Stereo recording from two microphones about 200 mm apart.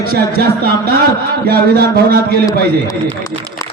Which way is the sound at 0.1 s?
50° right (ahead or behind).